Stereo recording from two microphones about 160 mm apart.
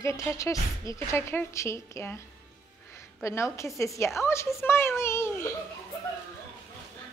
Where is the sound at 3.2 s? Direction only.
20° left (ahead or behind).